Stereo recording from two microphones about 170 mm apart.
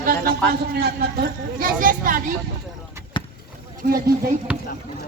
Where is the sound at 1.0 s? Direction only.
60° right (ahead or behind).